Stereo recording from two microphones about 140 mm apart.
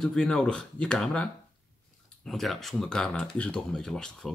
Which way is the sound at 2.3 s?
Centre (ahead or behind).